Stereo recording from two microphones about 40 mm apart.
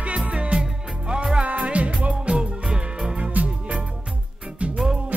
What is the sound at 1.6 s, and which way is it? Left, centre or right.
Music, right.